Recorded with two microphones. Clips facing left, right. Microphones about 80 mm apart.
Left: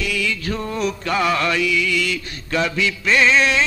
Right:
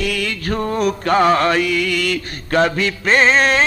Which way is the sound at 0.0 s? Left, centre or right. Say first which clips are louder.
Right 2 dB; right.